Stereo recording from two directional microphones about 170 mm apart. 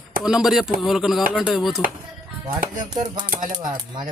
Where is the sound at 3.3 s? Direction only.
50° right (ahead or behind).